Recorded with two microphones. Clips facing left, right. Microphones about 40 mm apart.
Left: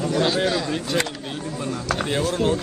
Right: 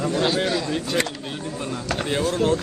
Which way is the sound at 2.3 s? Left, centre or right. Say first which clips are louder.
Right 2 dB; centre.